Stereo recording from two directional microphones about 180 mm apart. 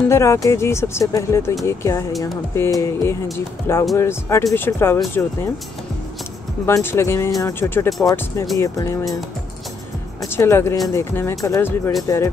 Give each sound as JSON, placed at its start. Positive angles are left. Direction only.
{"t": 0.1, "sound": "speech", "side_deg": 15}
{"t": 6.6, "sound": "speech", "side_deg": 15}
{"t": 10.2, "sound": "speech", "side_deg": 15}